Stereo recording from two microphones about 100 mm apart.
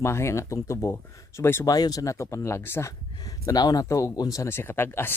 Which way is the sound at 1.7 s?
40° left (ahead or behind).